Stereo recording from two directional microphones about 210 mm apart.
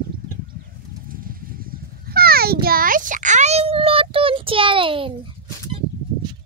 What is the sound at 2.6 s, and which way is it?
Child singing, 45° right (ahead or behind).